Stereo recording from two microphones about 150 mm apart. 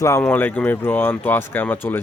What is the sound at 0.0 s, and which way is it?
Speech, 20° left (ahead or behind).